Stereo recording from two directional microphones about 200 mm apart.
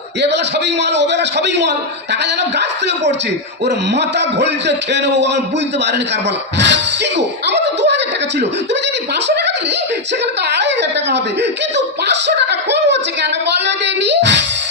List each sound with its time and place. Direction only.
0.2 s a man's voice: 60° right (ahead or behind)
3.7 s a man's voice: 60° right (ahead or behind)
6.6 s a sound: 60° right (ahead or behind)
10.5 s a man's voice: 60° right (ahead or behind)